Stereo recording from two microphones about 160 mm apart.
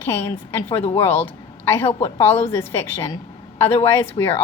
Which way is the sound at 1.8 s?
40° left (ahead or behind).